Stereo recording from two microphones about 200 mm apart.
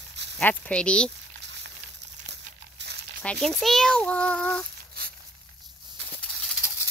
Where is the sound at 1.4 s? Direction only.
60° right (ahead or behind).